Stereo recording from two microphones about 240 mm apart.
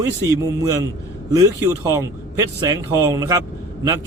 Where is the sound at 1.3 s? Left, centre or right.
Centre.